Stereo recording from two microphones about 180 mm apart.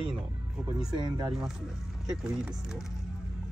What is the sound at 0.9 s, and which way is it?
Speech, 25° right (ahead or behind).